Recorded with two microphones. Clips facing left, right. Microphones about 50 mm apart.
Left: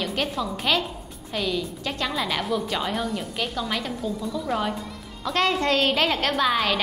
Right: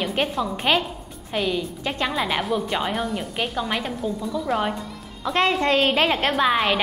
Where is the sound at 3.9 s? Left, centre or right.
Centre.